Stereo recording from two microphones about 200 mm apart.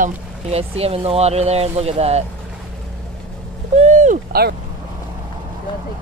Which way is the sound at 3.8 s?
35° right (ahead or behind).